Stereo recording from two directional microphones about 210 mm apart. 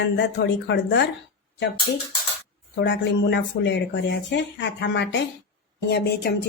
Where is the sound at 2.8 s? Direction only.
55° left (ahead or behind).